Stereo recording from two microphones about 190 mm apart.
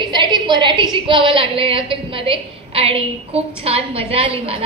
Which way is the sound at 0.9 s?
25° right (ahead or behind).